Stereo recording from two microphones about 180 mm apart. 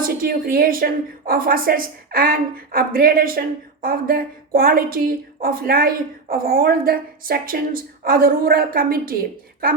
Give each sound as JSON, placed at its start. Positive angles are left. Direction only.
{"t": 0.0, "sound": "a woman's voice", "side_deg": -55}